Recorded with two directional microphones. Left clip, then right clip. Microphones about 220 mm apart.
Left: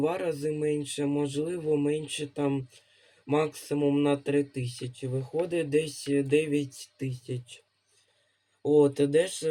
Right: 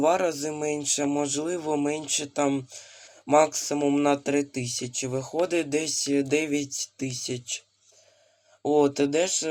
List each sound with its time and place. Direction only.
0.0 s speech: 10° right (ahead or behind)
8.8 s speech: 20° right (ahead or behind)